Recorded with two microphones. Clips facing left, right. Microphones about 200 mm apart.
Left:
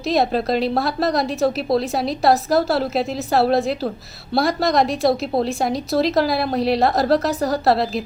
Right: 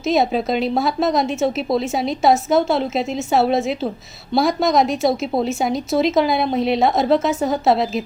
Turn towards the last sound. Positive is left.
turn(degrees=0)  # may be behind; listen again after turning